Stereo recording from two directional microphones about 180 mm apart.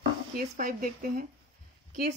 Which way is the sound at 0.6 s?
50° right (ahead or behind).